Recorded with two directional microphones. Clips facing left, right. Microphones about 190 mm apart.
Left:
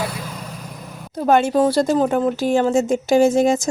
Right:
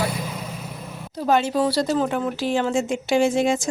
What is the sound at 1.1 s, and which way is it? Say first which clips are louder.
Speech: left 4 dB; 50° left (ahead or behind).